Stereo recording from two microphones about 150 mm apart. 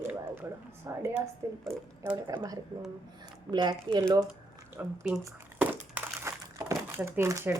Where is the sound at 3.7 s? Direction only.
25° right (ahead or behind).